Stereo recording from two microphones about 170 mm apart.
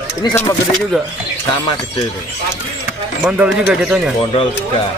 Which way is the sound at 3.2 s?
10° right (ahead or behind).